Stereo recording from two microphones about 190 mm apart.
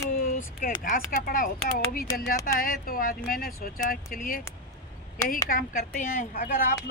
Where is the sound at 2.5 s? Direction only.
50° left (ahead or behind).